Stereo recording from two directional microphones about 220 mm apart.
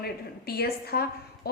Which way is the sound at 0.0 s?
45° left (ahead or behind).